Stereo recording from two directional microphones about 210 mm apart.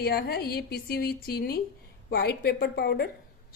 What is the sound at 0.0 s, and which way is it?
A woman's voice, 50° left (ahead or behind).